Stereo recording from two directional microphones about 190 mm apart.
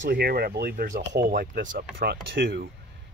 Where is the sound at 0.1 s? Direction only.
55° right (ahead or behind).